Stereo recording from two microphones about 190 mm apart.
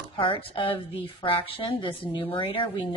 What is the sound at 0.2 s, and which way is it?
A woman's voice, 30° left (ahead or behind).